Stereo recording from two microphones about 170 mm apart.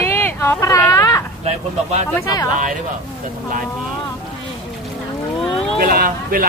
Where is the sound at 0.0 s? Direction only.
15° left (ahead or behind).